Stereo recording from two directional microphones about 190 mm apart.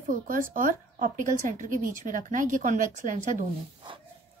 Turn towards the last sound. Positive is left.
turn(degrees=-45)  # may be behind; listen again after turning